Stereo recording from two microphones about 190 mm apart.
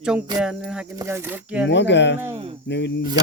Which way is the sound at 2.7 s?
65° left (ahead or behind).